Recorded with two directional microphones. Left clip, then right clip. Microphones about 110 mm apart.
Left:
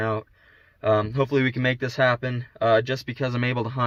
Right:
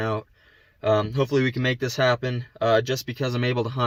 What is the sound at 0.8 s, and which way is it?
Speech, 45° right (ahead or behind).